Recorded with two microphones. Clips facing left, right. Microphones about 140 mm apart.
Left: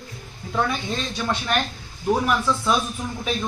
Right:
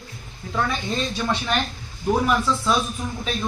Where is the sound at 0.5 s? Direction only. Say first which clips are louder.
Even; 5° left (ahead or behind).